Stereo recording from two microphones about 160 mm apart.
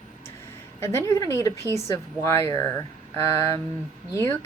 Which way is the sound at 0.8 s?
15° left (ahead or behind).